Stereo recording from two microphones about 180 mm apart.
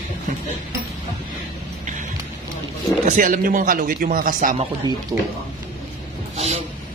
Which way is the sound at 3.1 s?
50° right (ahead or behind).